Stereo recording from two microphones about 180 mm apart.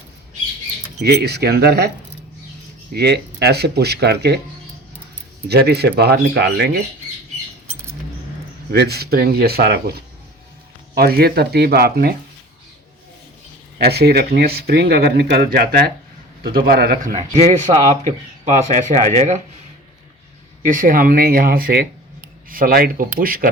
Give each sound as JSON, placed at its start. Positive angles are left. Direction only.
{"t": 1.0, "sound": "speech", "side_deg": -65}
{"t": 2.9, "sound": "speech", "side_deg": -65}
{"t": 5.5, "sound": "speech", "side_deg": -65}
{"t": 8.7, "sound": "speech", "side_deg": -65}
{"t": 13.7, "sound": "speech", "side_deg": -65}
{"t": 17.3, "sound": "speech", "side_deg": -40}
{"t": 20.6, "sound": "speech", "side_deg": -50}